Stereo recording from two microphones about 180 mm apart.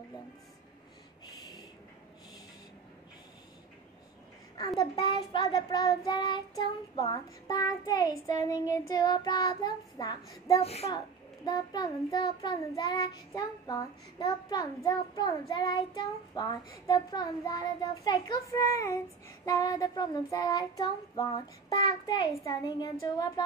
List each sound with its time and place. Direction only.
4.7 s child singing: 25° left (ahead or behind)
10.6 s a woman's voice: 35° left (ahead or behind)
11.4 s child singing: 20° left (ahead or behind)